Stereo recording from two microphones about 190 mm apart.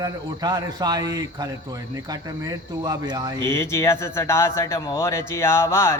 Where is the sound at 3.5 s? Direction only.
15° left (ahead or behind).